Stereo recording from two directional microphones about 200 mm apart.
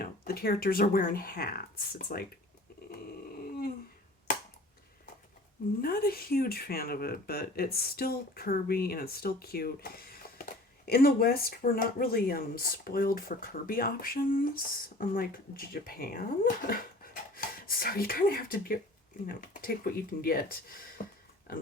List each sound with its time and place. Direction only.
0.0 s speech: 50° left (ahead or behind)
5.8 s speech: 50° left (ahead or behind)